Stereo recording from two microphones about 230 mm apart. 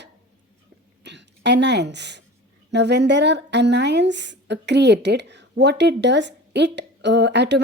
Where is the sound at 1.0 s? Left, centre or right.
Right.